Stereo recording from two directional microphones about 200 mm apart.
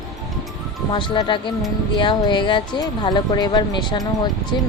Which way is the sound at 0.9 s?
25° left (ahead or behind).